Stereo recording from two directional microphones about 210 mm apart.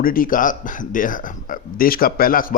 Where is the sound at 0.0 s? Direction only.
40° left (ahead or behind).